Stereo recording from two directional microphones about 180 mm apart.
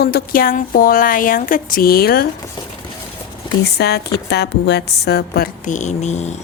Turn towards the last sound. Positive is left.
turn(degrees=40)  # may be behind; listen again after turning